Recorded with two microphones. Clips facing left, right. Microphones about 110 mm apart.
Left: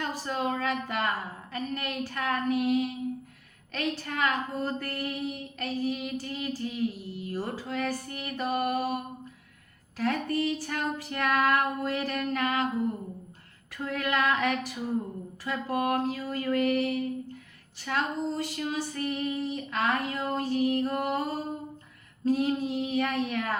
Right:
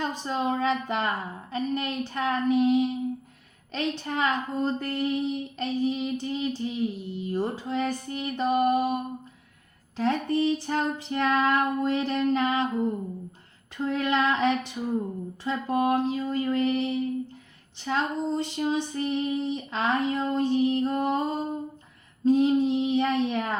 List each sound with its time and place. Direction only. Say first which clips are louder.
0.0 s a woman's voice: right 3 dB; 20° right (ahead or behind)
10.0 s a woman's voice: right 3 dB; 25° right (ahead or behind)
13.7 s a woman's voice: right 4 dB; 25° right (ahead or behind)